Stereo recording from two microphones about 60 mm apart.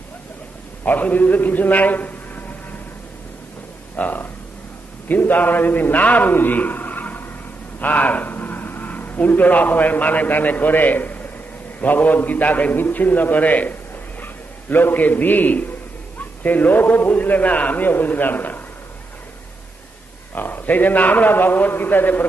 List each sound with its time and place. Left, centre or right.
0.9 s a man's voice: left
3.9 s a man's voice: left
20.3 s a man's voice: left